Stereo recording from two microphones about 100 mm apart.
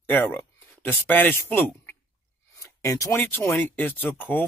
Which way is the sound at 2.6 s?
35° left (ahead or behind).